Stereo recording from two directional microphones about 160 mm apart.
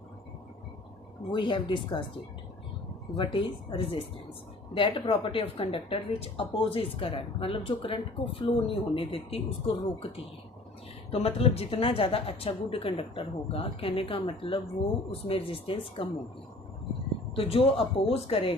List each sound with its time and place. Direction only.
1.3 s speech: 30° left (ahead or behind)
3.3 s speech: 30° left (ahead or behind)
17.3 s speech: 35° left (ahead or behind)